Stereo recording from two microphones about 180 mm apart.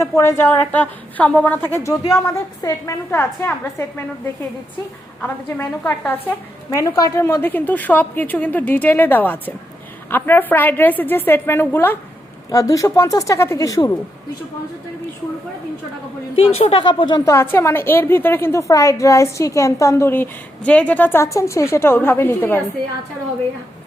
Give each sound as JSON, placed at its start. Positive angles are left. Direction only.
{"t": 0.0, "sound": "a woman's voice", "side_deg": 15}
{"t": 5.2, "sound": "a woman's voice", "side_deg": 10}
{"t": 16.3, "sound": "a woman's voice", "side_deg": 35}